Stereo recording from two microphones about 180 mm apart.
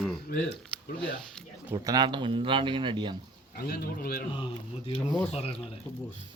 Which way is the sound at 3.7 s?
60° left (ahead or behind).